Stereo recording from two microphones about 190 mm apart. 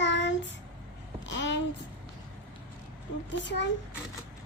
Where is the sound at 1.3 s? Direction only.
70° left (ahead or behind).